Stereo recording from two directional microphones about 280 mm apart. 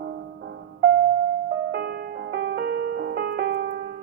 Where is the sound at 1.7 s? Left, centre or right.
Right.